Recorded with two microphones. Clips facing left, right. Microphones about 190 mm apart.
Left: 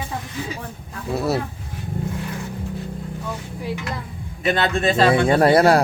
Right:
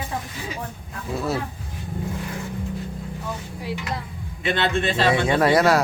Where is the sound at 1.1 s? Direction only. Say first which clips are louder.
Left 4 dB; 40° left (ahead or behind).